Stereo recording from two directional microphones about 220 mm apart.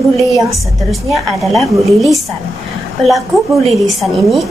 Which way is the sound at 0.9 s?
Centre (ahead or behind).